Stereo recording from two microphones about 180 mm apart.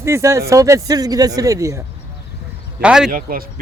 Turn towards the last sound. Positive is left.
turn(degrees=-55)  # may be behind; listen again after turning